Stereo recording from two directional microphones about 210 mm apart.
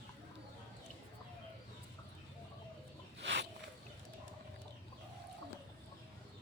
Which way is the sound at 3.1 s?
55° right (ahead or behind).